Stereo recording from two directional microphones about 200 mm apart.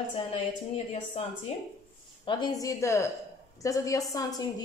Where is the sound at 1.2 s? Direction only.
30° left (ahead or behind).